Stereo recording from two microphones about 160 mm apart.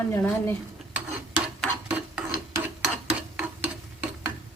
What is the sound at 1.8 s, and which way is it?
Filing, 10° right (ahead or behind).